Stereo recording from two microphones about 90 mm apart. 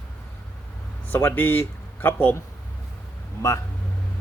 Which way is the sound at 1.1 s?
25° left (ahead or behind).